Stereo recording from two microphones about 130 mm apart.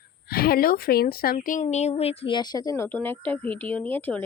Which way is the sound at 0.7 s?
90° left.